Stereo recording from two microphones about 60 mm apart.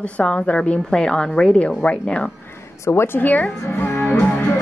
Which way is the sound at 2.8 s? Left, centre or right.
Left.